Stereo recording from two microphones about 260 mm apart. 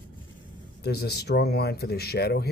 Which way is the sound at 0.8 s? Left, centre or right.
Left.